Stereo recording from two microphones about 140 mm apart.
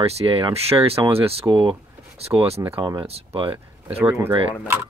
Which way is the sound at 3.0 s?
45° right (ahead or behind).